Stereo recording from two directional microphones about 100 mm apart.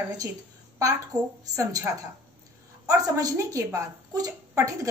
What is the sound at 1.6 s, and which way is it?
A woman's voice, 35° right (ahead or behind).